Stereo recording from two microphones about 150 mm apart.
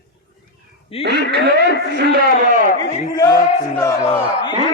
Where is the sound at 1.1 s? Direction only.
90° right.